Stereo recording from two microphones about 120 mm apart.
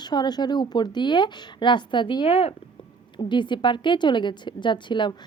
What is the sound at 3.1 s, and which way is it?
A woman's voice, 40° left (ahead or behind).